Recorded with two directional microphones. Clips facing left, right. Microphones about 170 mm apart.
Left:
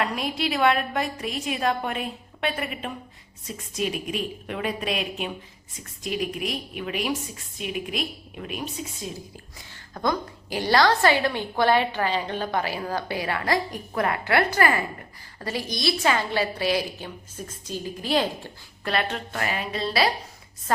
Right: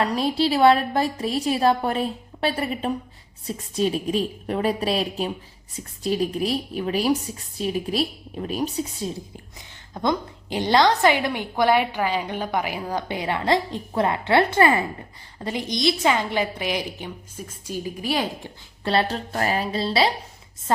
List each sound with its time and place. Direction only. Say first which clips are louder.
0.0 s a woman's voice: right 5 dB; 35° right (ahead or behind)
9.9 s a woman's voice: right 2 dB; 20° right (ahead or behind)
18.9 s a woman's voice: right 4 dB; 35° right (ahead or behind)